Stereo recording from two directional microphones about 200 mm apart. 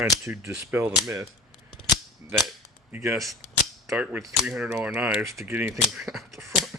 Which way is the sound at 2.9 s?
10° right (ahead or behind).